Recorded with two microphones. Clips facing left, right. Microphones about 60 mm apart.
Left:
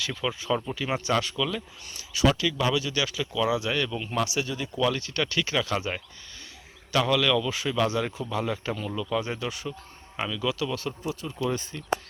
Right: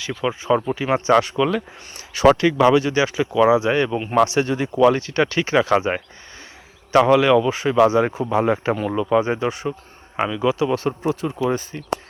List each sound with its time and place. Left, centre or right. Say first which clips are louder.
0.0 s speech: right 5 dB; centre
0.3 s speech: right 9 dB; right
2.0 s a sound: right 9 dB; right
2.3 s speech: right 10 dB; right
2.6 s speech: right 12 dB; right
4.2 s speech: right 11 dB; right
4.5 s speech: right 11 dB; right